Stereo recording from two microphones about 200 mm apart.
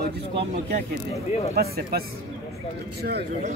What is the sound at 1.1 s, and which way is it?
Speech, 30° left (ahead or behind).